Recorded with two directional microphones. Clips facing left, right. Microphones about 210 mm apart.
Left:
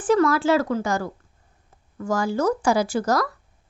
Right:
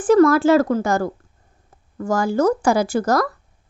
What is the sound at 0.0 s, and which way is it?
A woman's voice, 45° right (ahead or behind).